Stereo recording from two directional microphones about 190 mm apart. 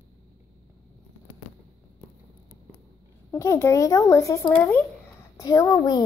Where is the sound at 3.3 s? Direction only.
15° left (ahead or behind).